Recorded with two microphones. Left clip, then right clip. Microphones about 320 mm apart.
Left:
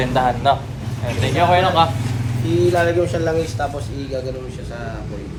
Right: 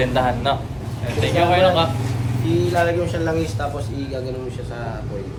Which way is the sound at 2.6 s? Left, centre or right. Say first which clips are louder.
Left 4 dB; centre.